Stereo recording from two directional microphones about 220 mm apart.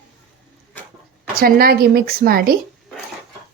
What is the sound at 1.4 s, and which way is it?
A woman's voice, 45° right (ahead or behind).